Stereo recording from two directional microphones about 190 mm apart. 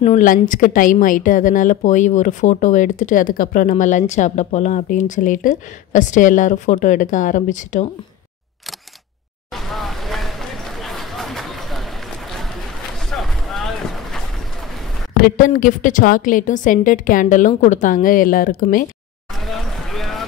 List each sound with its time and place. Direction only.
0.0 s a woman's voice: 40° left (ahead or behind)
9.5 s vehicle: centre (ahead or behind)
10.8 s chatter: centre (ahead or behind)
13.1 s a sound: centre (ahead or behind)
15.1 s a woman's voice: 50° left (ahead or behind)
19.4 s clip-clop: centre (ahead or behind)